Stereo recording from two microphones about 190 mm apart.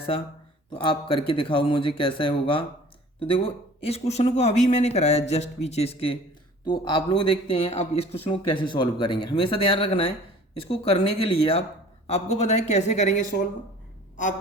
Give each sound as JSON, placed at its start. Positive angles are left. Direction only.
{"t": 0.8, "sound": "speech", "side_deg": 25}